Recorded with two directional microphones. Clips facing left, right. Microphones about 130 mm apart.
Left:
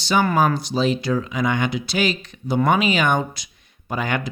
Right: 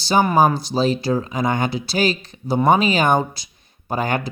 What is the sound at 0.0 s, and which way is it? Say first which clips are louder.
Speech: right 3 dB; 35° right (ahead or behind).